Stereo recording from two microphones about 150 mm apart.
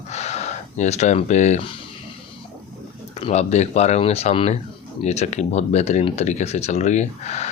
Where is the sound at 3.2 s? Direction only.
45° left (ahead or behind).